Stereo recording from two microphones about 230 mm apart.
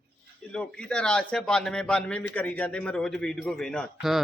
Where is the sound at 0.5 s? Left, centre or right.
Centre.